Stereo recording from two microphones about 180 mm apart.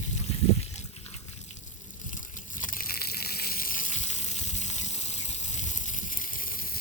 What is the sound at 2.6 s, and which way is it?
Water, 55° left (ahead or behind).